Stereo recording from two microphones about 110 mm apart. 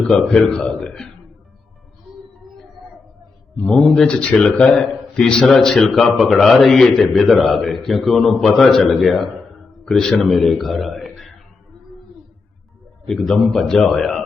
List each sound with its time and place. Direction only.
0.3 s speech: 5° left (ahead or behind)
3.8 s a man's voice: 5° left (ahead or behind)
13.1 s speech: 5° left (ahead or behind)